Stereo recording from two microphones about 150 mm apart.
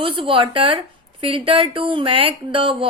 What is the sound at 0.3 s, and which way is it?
A woman's voice, 35° right (ahead or behind).